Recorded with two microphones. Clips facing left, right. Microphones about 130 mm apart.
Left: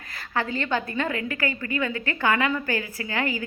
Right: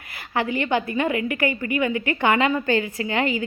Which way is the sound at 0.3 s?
15° right (ahead or behind).